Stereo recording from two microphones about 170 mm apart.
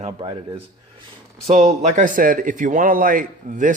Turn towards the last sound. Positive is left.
turn(degrees=-50)  # may be behind; listen again after turning